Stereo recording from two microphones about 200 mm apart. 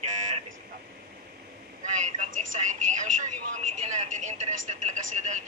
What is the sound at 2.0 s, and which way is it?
Speech, 35° right (ahead or behind).